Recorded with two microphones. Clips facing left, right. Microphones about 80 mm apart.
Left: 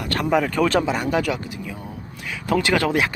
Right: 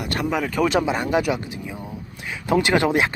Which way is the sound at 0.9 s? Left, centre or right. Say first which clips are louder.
Right 1 dB; right.